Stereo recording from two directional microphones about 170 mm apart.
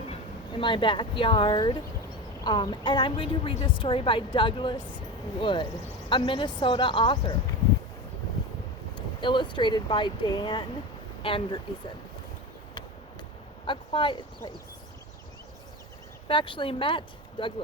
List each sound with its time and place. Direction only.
0.1 s speech: 30° left (ahead or behind)
9.2 s speech: 30° left (ahead or behind)
13.7 s speech: 30° left (ahead or behind)
16.3 s speech: 30° left (ahead or behind)